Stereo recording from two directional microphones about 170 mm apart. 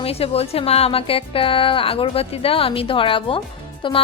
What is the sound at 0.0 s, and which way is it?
A woman's voice, 35° left (ahead or behind).